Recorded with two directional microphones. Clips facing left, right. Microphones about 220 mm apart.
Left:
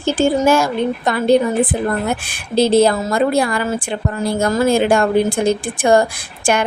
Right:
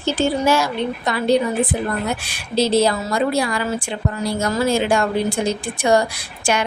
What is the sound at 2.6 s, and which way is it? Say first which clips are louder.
A woman's voice: left 4 dB; 55° left (ahead or behind).